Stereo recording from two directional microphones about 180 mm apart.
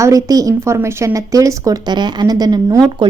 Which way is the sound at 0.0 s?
20° right (ahead or behind).